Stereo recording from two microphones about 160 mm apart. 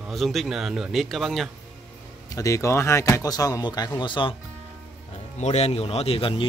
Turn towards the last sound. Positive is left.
turn(degrees=35)  # may be behind; listen again after turning